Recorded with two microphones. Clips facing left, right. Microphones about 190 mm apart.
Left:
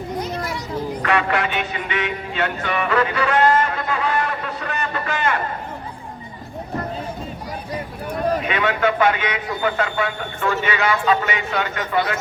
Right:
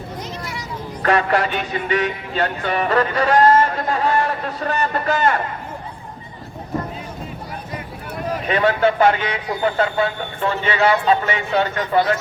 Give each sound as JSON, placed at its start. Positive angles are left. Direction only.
{"t": 1.0, "sound": "music", "side_deg": -40}
{"t": 8.4, "sound": "speech", "side_deg": -35}